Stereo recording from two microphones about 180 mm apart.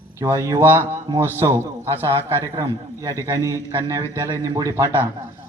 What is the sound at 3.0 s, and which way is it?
A man's voice, 15° right (ahead or behind).